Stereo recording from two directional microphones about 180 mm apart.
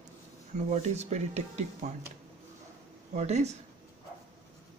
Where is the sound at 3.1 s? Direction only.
40° right (ahead or behind).